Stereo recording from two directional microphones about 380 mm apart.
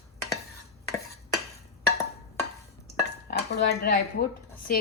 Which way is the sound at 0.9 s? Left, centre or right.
Centre.